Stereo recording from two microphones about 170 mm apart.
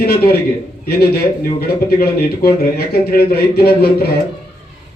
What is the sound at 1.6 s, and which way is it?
A man's voice, 65° left (ahead or behind).